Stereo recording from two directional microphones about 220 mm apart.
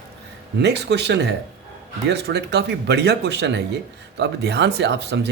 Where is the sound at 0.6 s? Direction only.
50° right (ahead or behind).